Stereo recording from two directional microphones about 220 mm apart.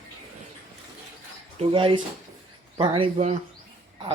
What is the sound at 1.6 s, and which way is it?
Speech, 25° right (ahead or behind).